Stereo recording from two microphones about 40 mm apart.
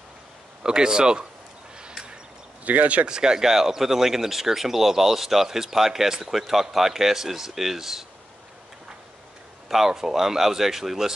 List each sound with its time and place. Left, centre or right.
0.7 s speech: centre
2.6 s speech: right
3.1 s speech: centre
9.7 s speech: centre